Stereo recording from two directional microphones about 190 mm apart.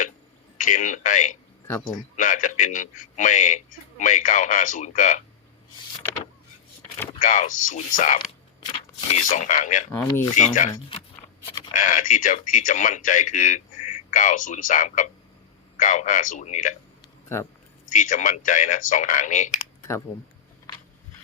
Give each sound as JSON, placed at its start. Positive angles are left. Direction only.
{"t": 0.6, "sound": "speech", "side_deg": 40}
{"t": 1.6, "sound": "speech", "side_deg": 15}
{"t": 2.1, "sound": "speech", "side_deg": 40}
{"t": 7.2, "sound": "speech", "side_deg": 40}
{"t": 8.6, "sound": "speech", "side_deg": 35}
{"t": 9.9, "sound": "speech", "side_deg": 15}
{"t": 11.7, "sound": "speech", "side_deg": 40}
{"t": 17.8, "sound": "speech", "side_deg": 40}
{"t": 20.7, "sound": "a sound", "side_deg": 20}